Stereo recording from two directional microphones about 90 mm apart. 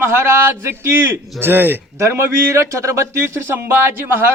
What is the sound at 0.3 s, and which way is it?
Speech, 30° right (ahead or behind).